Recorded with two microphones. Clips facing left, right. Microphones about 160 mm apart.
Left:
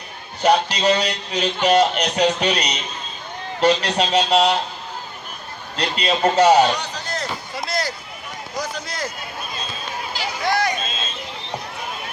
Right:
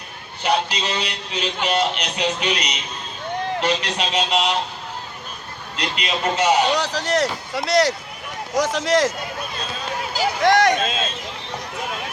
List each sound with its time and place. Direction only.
0.4 s a man's voice: 40° left (ahead or behind)
5.7 s a man's voice: 35° left (ahead or behind)
6.7 s speech: 90° right
8.5 s speech: 90° right
10.4 s a sound: 75° right (ahead or behind)